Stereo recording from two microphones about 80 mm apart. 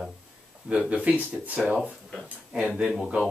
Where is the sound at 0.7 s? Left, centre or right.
Centre.